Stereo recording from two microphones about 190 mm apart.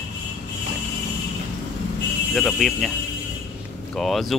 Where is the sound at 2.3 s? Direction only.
Centre (ahead or behind).